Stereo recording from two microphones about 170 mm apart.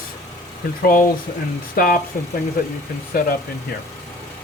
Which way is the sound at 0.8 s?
55° left (ahead or behind).